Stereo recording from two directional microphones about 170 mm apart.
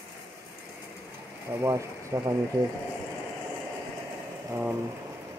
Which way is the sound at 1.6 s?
20° right (ahead or behind).